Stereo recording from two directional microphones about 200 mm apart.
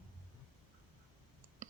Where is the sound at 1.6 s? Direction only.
40° right (ahead or behind).